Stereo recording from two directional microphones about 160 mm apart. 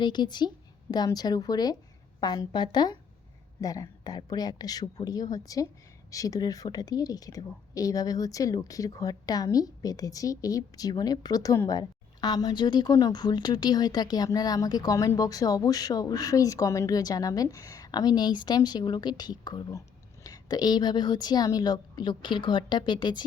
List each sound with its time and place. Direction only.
0.0 s a woman's voice: 30° left (ahead or behind)